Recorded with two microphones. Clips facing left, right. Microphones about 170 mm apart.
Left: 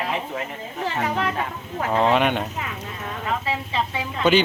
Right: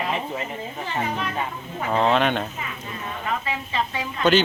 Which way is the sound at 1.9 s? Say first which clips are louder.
Left 1 dB; 10° left (ahead or behind).